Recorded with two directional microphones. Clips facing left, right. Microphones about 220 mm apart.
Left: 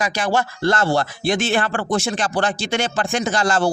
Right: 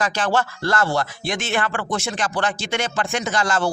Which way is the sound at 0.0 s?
10° left (ahead or behind).